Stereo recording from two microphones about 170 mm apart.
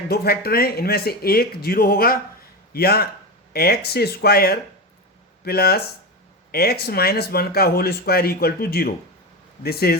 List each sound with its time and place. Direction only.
0.1 s speech: 65° left (ahead or behind)